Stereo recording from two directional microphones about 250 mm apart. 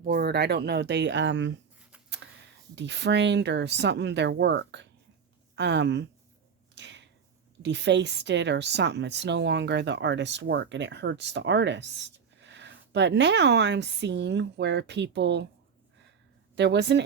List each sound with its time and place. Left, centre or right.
0.0 s speech: right
2.7 s speech: right
6.7 s a sound: right
7.6 s speech: right
16.6 s speech: right